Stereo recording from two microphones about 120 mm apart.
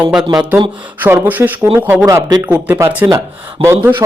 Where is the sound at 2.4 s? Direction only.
15° right (ahead or behind).